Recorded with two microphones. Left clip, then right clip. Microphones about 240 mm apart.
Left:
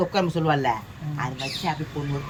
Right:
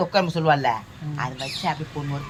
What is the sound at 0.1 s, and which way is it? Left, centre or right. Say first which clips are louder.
A man's voice: right 3 dB; centre.